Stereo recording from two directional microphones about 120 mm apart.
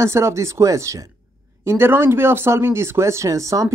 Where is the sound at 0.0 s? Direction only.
25° right (ahead or behind).